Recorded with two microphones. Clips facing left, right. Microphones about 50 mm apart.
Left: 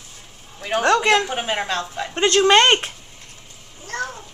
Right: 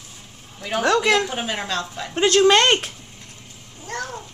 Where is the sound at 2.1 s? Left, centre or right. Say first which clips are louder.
Even; centre.